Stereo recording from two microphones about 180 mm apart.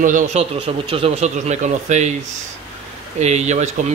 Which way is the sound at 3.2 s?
40° right (ahead or behind).